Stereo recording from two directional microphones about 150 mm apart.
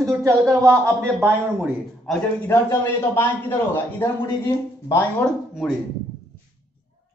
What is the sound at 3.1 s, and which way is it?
Speech, 15° left (ahead or behind).